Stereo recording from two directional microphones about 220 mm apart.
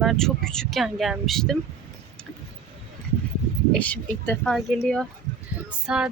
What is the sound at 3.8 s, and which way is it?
Speech, 5° left (ahead or behind).